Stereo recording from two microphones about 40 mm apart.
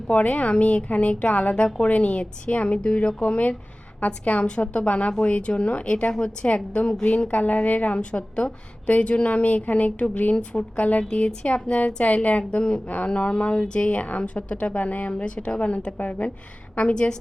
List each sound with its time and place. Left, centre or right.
0.1 s a woman's voice: left
10.3 s a woman's voice: left
15.1 s a woman's voice: left